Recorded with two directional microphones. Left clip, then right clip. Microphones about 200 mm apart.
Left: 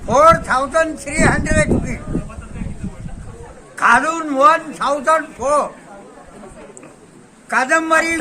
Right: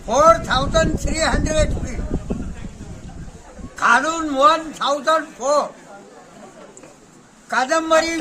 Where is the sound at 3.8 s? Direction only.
Centre (ahead or behind).